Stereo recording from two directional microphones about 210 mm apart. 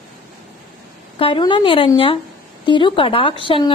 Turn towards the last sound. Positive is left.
turn(degrees=25)  # may be behind; listen again after turning